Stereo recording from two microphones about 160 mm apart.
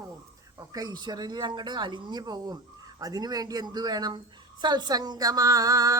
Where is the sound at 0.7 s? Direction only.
25° right (ahead or behind).